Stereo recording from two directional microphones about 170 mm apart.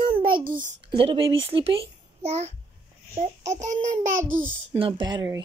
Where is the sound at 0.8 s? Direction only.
30° right (ahead or behind).